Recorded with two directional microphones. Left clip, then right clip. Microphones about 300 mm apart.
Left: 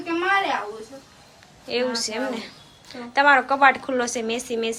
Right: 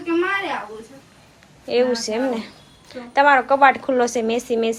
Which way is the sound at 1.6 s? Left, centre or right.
Centre.